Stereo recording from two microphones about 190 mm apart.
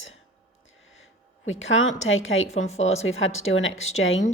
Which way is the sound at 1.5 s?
90° left.